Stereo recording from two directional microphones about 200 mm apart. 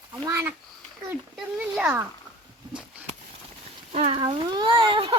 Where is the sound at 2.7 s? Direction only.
5° right (ahead or behind).